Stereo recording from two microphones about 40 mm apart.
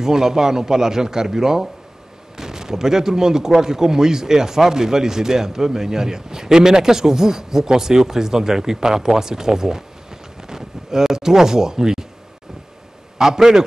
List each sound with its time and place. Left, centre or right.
0.0 s speech: centre
13.2 s speech: centre